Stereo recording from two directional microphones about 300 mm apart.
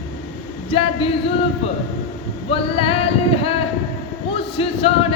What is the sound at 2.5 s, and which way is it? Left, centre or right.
A man's voice, centre.